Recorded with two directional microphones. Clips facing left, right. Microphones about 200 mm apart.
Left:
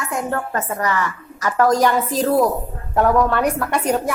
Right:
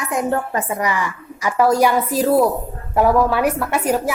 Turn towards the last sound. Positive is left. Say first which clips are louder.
# right 1 dB
turn(degrees=-5)  # may be behind; listen again after turning